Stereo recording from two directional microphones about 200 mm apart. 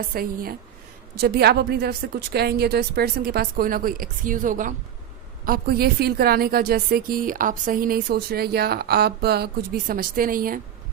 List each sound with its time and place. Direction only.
0.1 s a woman's voice: 45° right (ahead or behind)